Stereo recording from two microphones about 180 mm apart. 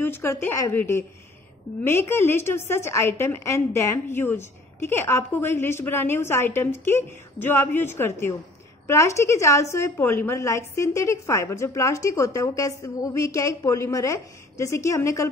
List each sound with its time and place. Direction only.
0.0 s a woman's voice: 15° left (ahead or behind)